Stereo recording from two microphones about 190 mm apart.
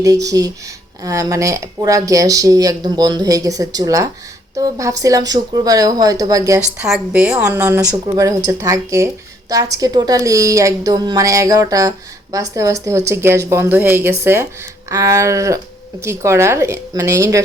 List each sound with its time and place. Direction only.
0.0 s a woman's voice: 20° right (ahead or behind)
6.6 s a woman's voice: 5° right (ahead or behind)